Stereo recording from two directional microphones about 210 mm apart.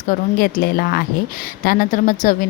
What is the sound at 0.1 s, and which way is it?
A woman's voice, 45° left (ahead or behind).